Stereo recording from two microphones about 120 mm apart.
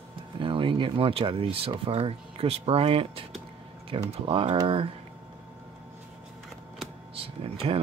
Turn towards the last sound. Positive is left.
turn(degrees=-50)  # may be behind; listen again after turning